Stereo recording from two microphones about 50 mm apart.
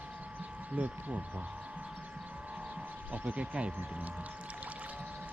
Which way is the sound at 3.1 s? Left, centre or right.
Right.